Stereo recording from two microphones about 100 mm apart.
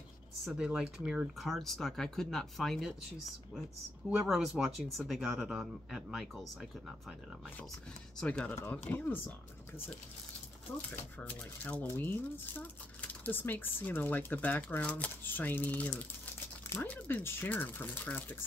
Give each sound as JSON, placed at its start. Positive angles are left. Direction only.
{"t": 0.6, "sound": "speech", "side_deg": -10}
{"t": 4.3, "sound": "speech", "side_deg": -5}
{"t": 8.2, "sound": "speech", "side_deg": 10}
{"t": 8.5, "sound": "speech", "side_deg": 20}
{"t": 11.1, "sound": "speech", "side_deg": 15}